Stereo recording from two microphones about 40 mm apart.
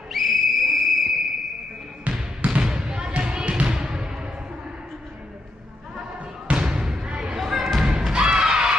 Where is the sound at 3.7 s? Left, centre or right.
Centre.